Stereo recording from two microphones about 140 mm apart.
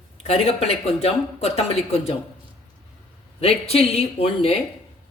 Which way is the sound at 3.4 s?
45° left (ahead or behind).